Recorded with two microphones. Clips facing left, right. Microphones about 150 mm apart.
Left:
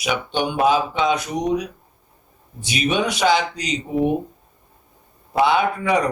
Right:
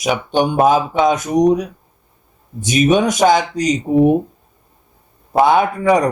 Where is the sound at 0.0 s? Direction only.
45° right (ahead or behind).